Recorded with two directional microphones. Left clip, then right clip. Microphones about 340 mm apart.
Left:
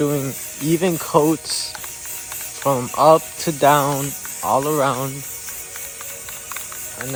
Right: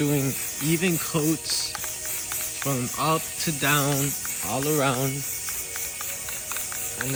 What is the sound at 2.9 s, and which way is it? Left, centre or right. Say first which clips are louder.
Speech: left 13 dB; centre.